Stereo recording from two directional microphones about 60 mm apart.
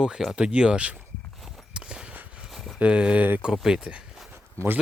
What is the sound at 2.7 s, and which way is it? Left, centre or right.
Speech, centre.